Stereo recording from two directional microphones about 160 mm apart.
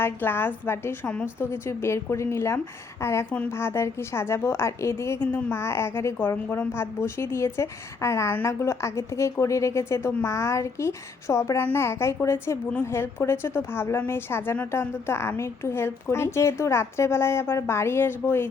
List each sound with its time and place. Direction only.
0.0 s a woman's voice: 15° left (ahead or behind)